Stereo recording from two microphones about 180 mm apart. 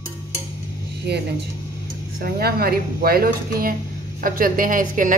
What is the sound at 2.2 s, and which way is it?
A woman's voice, 60° right (ahead or behind).